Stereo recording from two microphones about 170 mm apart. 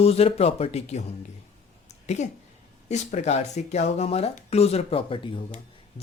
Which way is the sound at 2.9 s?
45° left (ahead or behind).